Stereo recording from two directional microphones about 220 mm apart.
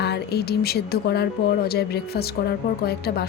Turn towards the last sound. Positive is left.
turn(degrees=45)  # may be behind; listen again after turning